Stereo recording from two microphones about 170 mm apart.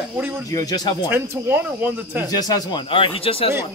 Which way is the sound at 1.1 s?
15° right (ahead or behind).